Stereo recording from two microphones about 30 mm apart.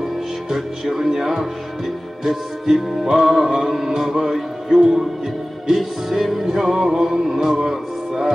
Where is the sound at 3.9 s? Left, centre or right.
Right.